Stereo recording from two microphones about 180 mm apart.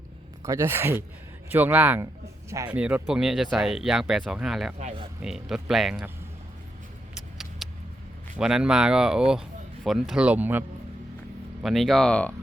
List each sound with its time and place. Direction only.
0.4 s speech: 15° right (ahead or behind)
7.6 s vehicle: centre (ahead or behind)
8.4 s speech: 5° right (ahead or behind)
11.6 s speech: centre (ahead or behind)